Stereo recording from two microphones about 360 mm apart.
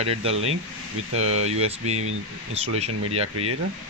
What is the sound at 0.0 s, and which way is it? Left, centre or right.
Speech, centre.